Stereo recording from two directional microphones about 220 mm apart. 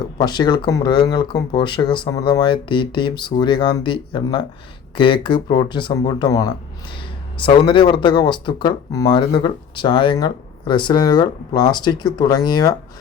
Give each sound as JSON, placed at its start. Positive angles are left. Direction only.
{"t": 0.2, "sound": "speech", "side_deg": 20}